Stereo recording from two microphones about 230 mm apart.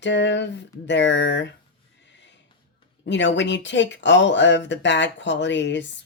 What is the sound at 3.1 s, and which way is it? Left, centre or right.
Speech, left.